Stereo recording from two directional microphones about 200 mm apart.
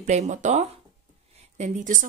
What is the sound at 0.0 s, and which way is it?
Speech, 35° right (ahead or behind).